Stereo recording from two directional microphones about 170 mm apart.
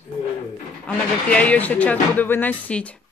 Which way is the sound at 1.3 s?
10° left (ahead or behind).